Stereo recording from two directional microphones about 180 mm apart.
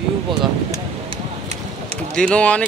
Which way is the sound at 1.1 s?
35° right (ahead or behind).